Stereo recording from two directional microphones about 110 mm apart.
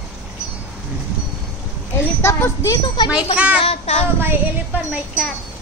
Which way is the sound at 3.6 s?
70° left (ahead or behind).